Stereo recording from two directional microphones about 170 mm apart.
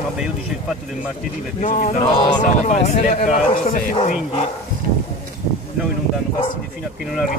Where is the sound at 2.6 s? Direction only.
40° left (ahead or behind).